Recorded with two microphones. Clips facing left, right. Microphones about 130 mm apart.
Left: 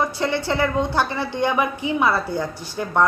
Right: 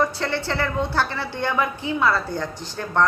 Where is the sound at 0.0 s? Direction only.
15° left (ahead or behind).